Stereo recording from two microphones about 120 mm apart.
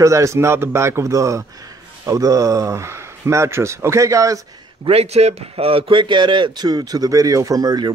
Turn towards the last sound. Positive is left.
turn(degrees=-30)  # may be behind; listen again after turning